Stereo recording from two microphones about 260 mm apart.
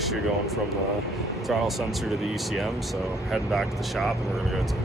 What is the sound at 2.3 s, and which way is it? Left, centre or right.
Speech, centre.